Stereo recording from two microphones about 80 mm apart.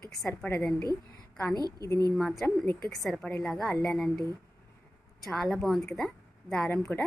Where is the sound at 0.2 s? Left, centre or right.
Left.